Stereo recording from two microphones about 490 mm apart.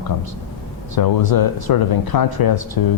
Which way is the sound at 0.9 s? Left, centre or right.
Left.